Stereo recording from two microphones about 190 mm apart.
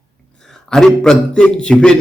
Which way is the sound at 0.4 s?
Centre (ahead or behind).